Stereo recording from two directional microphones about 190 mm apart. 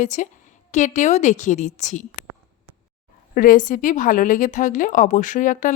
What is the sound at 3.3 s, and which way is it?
A woman's voice, 45° left (ahead or behind).